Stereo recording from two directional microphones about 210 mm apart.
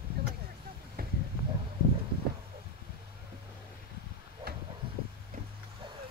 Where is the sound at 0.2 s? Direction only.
50° right (ahead or behind).